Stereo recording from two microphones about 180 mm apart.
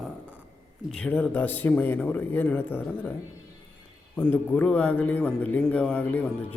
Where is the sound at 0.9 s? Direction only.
5° left (ahead or behind).